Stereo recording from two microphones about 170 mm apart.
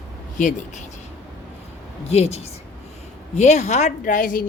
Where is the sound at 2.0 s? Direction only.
40° left (ahead or behind).